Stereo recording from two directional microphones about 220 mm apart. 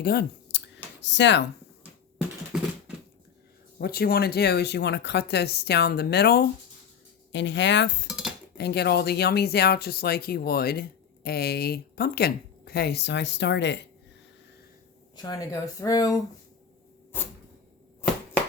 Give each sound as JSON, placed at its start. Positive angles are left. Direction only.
{"t": 0.0, "sound": "speech", "side_deg": 45}
{"t": 3.8, "sound": "speech", "side_deg": 45}
{"t": 8.0, "sound": "dishes", "side_deg": 0}
{"t": 8.5, "sound": "speech", "side_deg": 50}
{"t": 15.1, "sound": "speech", "side_deg": 15}
{"t": 17.1, "sound": "a sound", "side_deg": 10}